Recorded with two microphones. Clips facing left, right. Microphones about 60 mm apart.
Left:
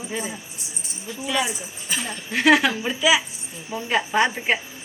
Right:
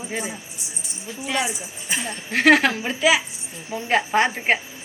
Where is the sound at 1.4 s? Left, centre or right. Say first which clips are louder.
Right 1 dB; right.